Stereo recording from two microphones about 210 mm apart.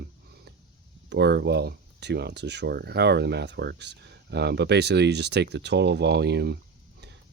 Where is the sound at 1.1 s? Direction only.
50° right (ahead or behind).